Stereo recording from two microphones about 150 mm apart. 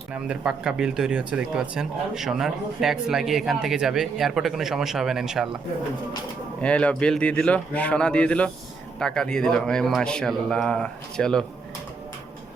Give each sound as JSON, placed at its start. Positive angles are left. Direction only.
{"t": 0.1, "sound": "speech", "side_deg": -5}
{"t": 6.6, "sound": "a man's voice", "side_deg": 10}